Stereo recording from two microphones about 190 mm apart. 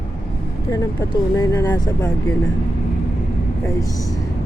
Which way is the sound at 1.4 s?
20° left (ahead or behind).